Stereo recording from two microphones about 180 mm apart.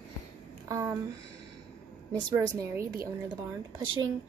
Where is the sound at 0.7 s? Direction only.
15° right (ahead or behind).